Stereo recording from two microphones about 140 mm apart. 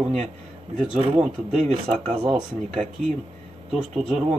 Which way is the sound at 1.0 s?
45° right (ahead or behind).